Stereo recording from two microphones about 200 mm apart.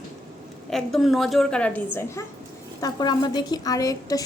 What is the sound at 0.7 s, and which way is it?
A woman's voice, centre (ahead or behind).